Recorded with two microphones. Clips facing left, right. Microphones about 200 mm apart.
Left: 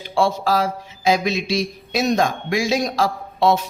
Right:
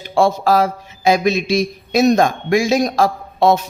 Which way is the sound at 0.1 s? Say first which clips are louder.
Right 4 dB; 50° right (ahead or behind).